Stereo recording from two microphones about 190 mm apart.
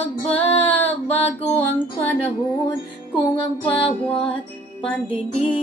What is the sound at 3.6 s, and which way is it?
Music, 25° left (ahead or behind).